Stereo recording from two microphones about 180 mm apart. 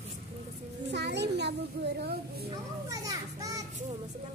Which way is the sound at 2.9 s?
20° right (ahead or behind).